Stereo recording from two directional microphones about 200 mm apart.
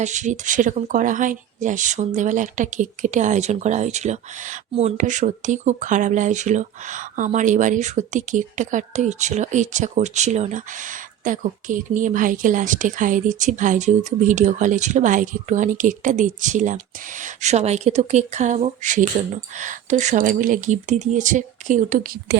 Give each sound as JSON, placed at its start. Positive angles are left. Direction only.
{"t": 0.0, "sound": "speech", "side_deg": -35}